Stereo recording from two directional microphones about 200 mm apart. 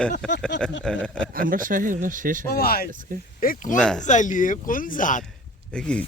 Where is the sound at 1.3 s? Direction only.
45° right (ahead or behind).